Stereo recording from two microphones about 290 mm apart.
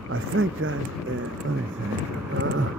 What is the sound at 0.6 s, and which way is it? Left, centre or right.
Speech, right.